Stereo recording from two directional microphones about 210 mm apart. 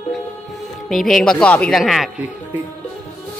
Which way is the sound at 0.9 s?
Centre (ahead or behind).